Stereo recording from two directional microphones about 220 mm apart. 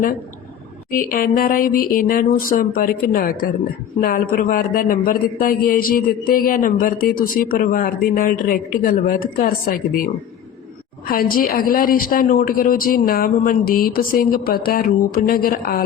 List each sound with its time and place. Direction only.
0.9 s a man's voice: 40° left (ahead or behind)
11.1 s a man's voice: 40° left (ahead or behind)